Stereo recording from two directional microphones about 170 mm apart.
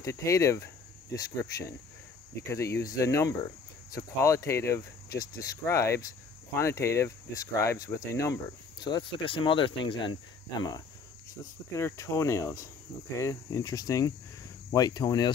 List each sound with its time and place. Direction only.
0.0 s speech: 15° left (ahead or behind)
11.7 s speech: 15° left (ahead or behind)